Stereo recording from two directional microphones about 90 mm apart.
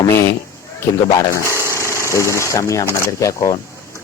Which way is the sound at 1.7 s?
30° left (ahead or behind).